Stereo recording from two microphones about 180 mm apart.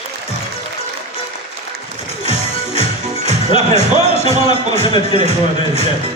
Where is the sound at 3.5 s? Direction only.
30° left (ahead or behind).